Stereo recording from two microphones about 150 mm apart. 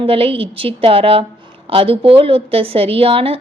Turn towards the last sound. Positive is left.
turn(degrees=-40)  # may be behind; listen again after turning